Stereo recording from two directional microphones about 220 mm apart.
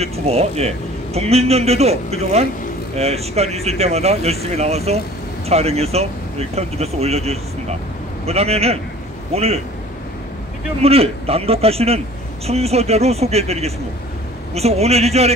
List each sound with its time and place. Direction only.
0.0 s a man's voice: 30° right (ahead or behind)
10.8 s a man's voice: 25° right (ahead or behind)